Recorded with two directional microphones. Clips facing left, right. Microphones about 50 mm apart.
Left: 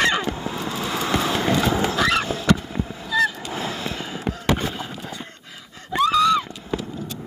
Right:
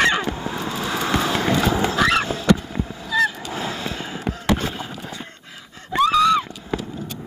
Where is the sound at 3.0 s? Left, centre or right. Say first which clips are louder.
Right 1 dB; right.